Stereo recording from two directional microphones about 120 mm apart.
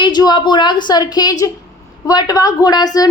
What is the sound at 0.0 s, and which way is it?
A woman's voice, 35° left (ahead or behind).